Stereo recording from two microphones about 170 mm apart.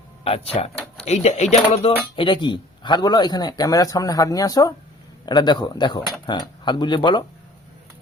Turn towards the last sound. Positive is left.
turn(degrees=25)  # may be behind; listen again after turning